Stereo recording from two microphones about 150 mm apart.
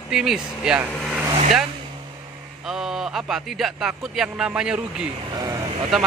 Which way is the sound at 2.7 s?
Centre (ahead or behind).